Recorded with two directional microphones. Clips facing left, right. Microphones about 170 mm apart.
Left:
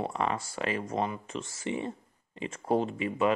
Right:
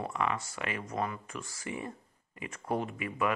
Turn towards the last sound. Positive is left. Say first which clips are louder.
# left 5 dB
turn(degrees=25)  # may be behind; listen again after turning